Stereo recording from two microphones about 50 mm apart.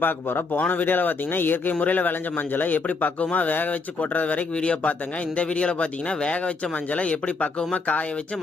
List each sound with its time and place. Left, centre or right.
0.0 s a man's voice: left